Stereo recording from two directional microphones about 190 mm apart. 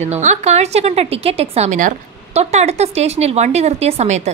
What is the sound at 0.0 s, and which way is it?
A woman's voice, 40° right (ahead or behind).